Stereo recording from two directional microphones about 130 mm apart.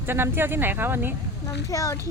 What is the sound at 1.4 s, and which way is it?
Speech, 25° left (ahead or behind).